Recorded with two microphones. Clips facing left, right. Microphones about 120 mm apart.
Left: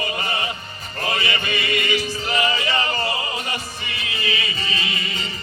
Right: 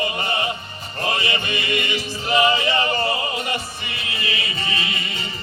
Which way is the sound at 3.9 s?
30° right (ahead or behind).